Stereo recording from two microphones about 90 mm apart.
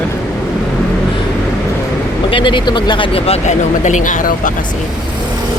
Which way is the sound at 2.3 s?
65° left (ahead or behind).